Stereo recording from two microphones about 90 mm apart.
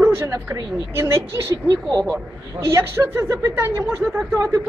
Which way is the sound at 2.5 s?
30° right (ahead or behind).